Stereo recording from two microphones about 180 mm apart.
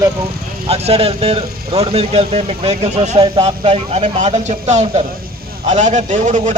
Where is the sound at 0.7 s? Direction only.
35° right (ahead or behind).